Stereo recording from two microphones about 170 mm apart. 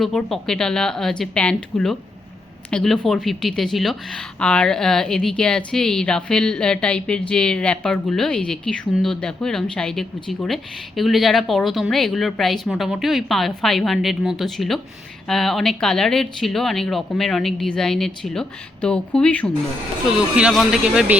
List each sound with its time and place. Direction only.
0.0 s speech: centre (ahead or behind)
20.1 s speech: 5° right (ahead or behind)